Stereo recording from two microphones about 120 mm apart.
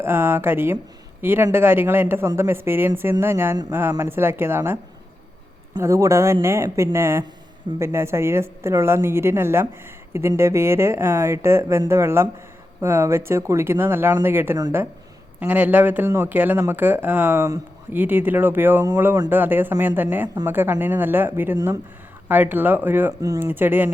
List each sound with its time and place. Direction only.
0.0 s a woman's voice: 15° right (ahead or behind)
5.8 s a woman's voice: 25° right (ahead or behind)
23.2 s a woman's voice: 30° right (ahead or behind)
23.5 s speech: 15° right (ahead or behind)